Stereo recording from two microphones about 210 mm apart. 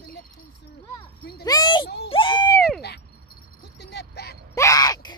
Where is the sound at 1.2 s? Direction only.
50° left (ahead or behind).